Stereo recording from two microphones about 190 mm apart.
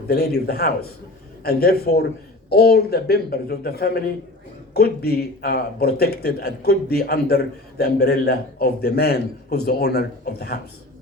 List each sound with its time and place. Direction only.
0.1 s speech: 55° left (ahead or behind)